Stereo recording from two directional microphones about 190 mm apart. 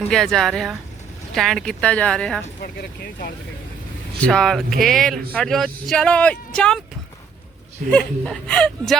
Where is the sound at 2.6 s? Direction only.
55° left (ahead or behind).